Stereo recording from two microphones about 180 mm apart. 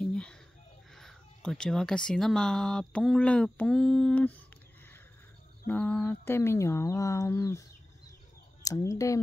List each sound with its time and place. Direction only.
0.0 s a sound: 5° left (ahead or behind)
0.9 s speech: centre (ahead or behind)
5.7 s mantra: 10° left (ahead or behind)
8.6 s mantra: 20° left (ahead or behind)